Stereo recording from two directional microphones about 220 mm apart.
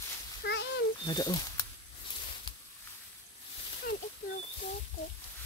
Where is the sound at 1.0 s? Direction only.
20° left (ahead or behind).